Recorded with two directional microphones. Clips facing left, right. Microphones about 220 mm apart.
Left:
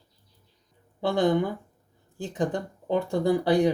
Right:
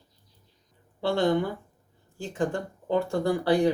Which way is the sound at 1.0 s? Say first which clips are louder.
Left 1 dB; 15° left (ahead or behind).